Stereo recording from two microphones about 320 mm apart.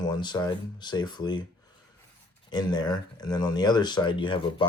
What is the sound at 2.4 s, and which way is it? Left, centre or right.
Speech, centre.